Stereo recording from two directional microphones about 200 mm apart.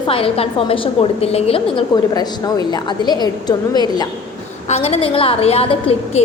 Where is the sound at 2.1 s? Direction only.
20° left (ahead or behind).